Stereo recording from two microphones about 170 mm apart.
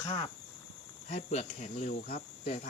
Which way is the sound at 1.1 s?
40° left (ahead or behind).